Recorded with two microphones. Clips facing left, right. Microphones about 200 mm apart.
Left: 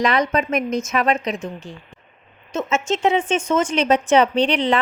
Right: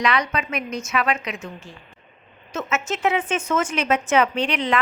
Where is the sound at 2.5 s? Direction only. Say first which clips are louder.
Left 4 dB; 25° left (ahead or behind).